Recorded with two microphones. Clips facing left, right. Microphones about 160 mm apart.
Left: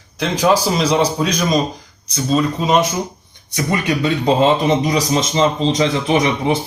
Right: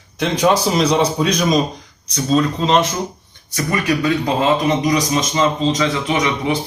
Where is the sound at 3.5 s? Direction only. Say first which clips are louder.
Even; 20° left (ahead or behind).